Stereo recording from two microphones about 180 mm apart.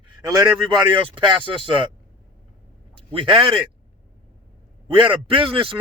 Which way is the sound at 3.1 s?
30° right (ahead or behind).